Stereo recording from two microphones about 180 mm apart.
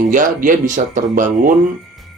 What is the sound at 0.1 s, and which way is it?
A man's voice, 50° right (ahead or behind).